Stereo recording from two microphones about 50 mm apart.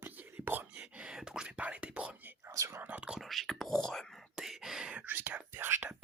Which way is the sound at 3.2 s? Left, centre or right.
Centre.